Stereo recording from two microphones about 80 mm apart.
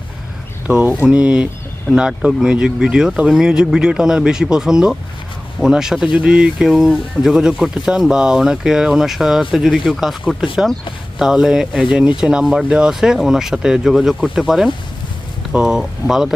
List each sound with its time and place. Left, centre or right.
0.7 s speech: centre